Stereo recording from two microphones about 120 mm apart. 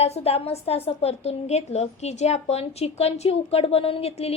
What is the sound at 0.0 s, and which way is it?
A woman's voice, 60° left (ahead or behind).